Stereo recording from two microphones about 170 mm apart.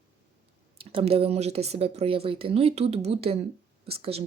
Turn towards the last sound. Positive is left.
turn(degrees=-35)  # may be behind; listen again after turning